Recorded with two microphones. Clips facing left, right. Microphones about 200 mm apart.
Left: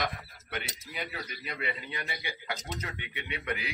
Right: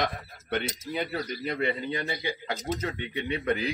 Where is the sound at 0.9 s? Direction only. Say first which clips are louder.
Right 7 dB; 45° right (ahead or behind).